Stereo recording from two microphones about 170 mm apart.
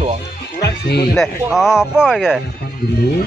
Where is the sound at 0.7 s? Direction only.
75° left (ahead or behind).